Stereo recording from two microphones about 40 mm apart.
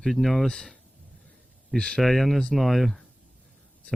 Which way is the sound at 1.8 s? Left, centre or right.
Left.